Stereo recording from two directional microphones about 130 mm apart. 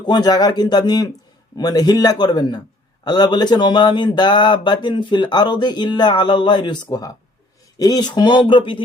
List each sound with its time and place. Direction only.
0.0 s speech: 30° left (ahead or behind)
7.8 s speech: 30° left (ahead or behind)